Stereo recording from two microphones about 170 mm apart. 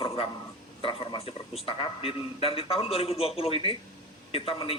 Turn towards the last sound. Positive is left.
turn(degrees=35)  # may be behind; listen again after turning